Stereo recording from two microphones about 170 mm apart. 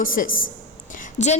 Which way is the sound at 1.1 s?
45° left (ahead or behind).